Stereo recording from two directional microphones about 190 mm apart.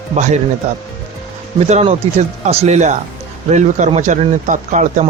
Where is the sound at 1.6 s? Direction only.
35° right (ahead or behind).